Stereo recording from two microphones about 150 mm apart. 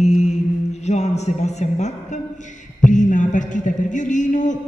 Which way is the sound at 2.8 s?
60° left (ahead or behind).